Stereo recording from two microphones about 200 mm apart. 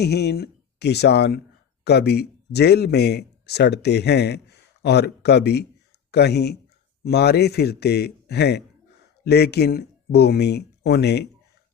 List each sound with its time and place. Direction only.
0.0 s a man's voice: 55° left (ahead or behind)